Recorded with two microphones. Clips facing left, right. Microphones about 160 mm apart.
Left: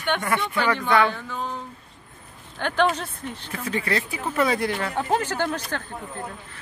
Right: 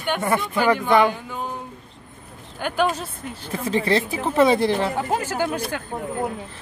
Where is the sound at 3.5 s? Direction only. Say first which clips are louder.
Right 6 dB; 25° right (ahead or behind).